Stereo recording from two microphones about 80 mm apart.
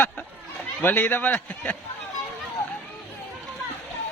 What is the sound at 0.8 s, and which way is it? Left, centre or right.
Speech, left.